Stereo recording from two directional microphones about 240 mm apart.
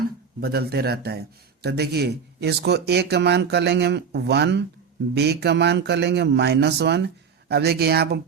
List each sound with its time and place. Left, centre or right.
0.3 s speech: right